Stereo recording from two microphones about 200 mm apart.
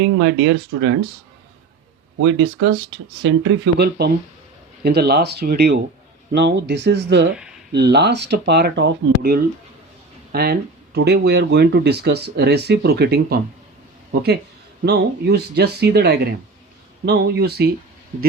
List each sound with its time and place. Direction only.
0.0 s speech: 60° right (ahead or behind)
2.2 s speech: 65° right (ahead or behind)
7.3 s a sound: 5° right (ahead or behind)
7.7 s speech: 55° right (ahead or behind)
14.8 s speech: 55° right (ahead or behind)